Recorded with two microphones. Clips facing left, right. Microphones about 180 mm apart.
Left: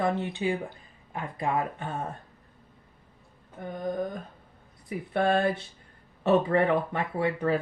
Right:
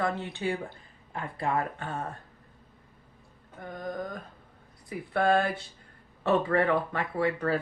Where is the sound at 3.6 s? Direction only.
20° left (ahead or behind).